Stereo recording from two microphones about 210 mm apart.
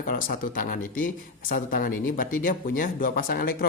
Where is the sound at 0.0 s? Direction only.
40° left (ahead or behind).